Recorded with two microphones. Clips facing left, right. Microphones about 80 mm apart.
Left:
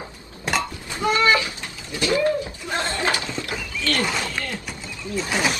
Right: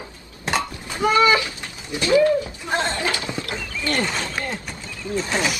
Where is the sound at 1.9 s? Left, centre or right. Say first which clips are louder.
Right 5 dB; right.